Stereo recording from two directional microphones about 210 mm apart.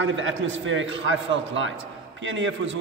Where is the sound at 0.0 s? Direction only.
65° right (ahead or behind).